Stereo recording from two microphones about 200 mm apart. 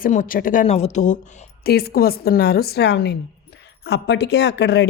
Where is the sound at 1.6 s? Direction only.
50° left (ahead or behind).